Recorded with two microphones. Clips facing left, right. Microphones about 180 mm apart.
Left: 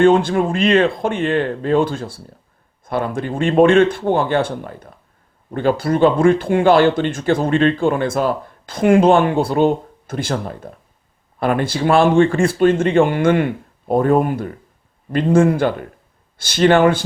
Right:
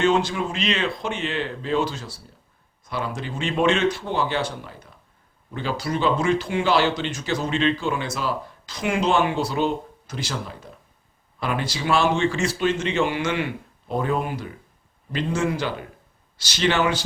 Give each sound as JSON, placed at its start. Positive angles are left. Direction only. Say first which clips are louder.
{"t": 0.0, "sound": "speech", "louder": "left 8 dB", "side_deg": 55}